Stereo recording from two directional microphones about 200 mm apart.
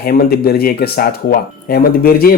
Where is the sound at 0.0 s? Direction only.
50° left (ahead or behind).